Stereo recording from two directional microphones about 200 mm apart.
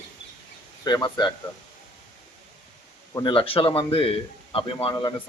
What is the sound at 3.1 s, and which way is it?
A man's voice, 25° left (ahead or behind).